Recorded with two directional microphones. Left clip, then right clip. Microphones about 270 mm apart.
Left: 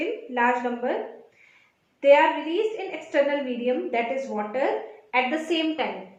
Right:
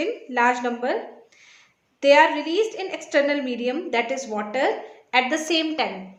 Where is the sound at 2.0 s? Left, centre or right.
Right.